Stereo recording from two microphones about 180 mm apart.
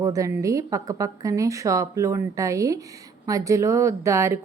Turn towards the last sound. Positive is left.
turn(degrees=-15)  # may be behind; listen again after turning